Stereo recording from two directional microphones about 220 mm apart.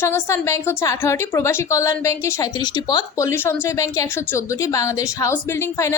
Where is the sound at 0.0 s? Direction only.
10° left (ahead or behind).